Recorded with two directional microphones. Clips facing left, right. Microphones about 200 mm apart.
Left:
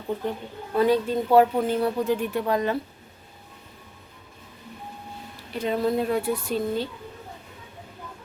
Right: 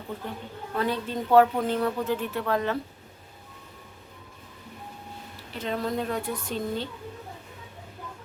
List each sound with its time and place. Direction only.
0.8 s speech: 15° left (ahead or behind)
5.5 s speech: 10° left (ahead or behind)